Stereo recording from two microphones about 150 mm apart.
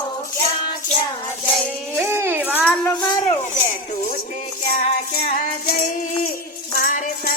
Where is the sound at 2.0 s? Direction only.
15° right (ahead or behind).